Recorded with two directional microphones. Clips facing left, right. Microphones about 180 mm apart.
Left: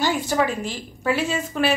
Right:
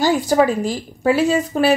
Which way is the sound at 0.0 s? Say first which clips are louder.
Right 6 dB; 40° right (ahead or behind).